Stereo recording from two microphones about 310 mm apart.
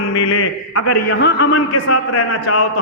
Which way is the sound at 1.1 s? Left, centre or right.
Left.